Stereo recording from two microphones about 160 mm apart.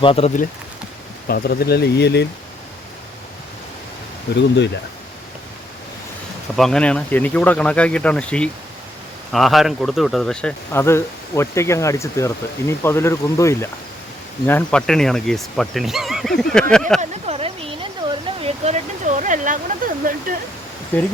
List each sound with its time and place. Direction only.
0.0 s speech: 35° left (ahead or behind)
1.3 s speech: 80° left
4.4 s speech: 90° left
6.6 s speech: 5° left (ahead or behind)
10.7 s speech: 15° left (ahead or behind)
17.0 s a sound: 40° right (ahead or behind); by 20.1 s 55° right (ahead or behind)
20.9 s speech: 10° left (ahead or behind)